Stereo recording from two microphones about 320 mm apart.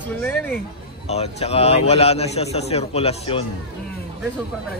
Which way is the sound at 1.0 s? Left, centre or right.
Centre.